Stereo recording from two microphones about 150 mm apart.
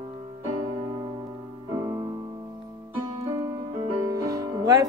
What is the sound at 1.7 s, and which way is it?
Music, 20° right (ahead or behind).